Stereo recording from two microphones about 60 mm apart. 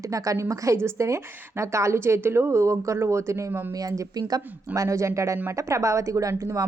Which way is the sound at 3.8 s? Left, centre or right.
Right.